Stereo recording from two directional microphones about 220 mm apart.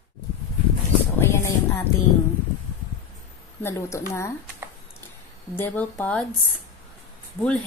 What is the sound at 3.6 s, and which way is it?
Speech, 10° left (ahead or behind).